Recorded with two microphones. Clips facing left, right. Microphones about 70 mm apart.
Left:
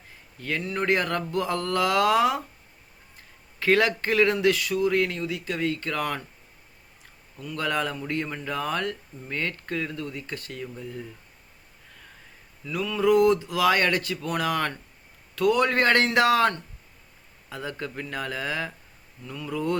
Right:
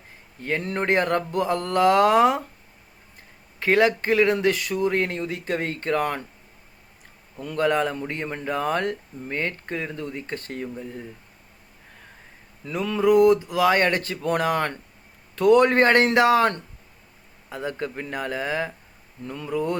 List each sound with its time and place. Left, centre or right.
0.3 s speech: right
3.6 s speech: right
7.5 s speech: right
12.6 s a sound: right
13.0 s speech: right
19.2 s speech: right
19.5 s speech: right